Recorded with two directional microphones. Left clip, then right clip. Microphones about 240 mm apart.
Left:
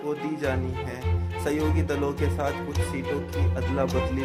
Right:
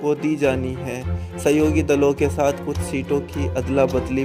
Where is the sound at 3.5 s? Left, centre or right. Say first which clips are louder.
Right 9 dB; right.